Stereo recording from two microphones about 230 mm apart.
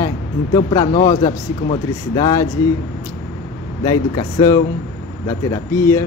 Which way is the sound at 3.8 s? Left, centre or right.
Centre.